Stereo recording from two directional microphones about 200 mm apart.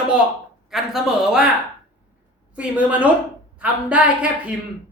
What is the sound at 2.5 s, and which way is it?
A woman's voice, 5° right (ahead or behind).